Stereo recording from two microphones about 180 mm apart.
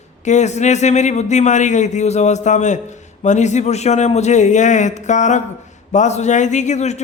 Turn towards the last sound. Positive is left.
turn(degrees=40)  # may be behind; listen again after turning